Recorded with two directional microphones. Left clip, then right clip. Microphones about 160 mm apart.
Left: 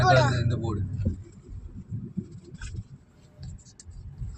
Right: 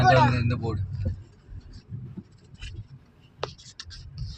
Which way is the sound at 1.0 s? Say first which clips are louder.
Left 3 dB; 20° left (ahead or behind).